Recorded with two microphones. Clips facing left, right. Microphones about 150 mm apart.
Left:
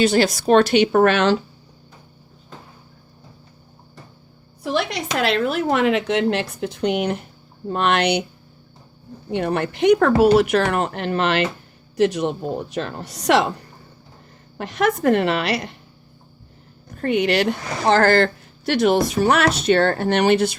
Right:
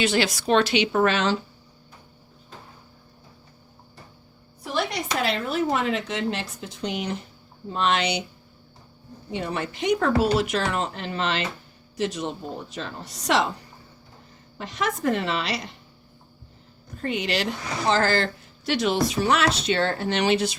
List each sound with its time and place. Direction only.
0.0 s speech: 45° left (ahead or behind); by 1.4 s 65° left (ahead or behind)
4.6 s a woman's voice: 85° left; by 8.2 s 60° left (ahead or behind)
9.3 s a woman's voice: 60° left (ahead or behind)
14.6 s a woman's voice: 60° left (ahead or behind)
17.0 s a woman's voice: 60° left (ahead or behind)